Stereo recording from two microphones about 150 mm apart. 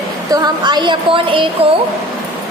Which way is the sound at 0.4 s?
30° right (ahead or behind).